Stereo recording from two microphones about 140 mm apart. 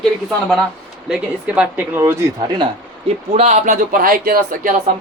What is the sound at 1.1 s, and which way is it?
Speech, 10° right (ahead or behind).